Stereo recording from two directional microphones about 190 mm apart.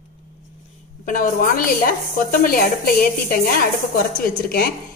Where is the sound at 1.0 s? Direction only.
45° left (ahead or behind).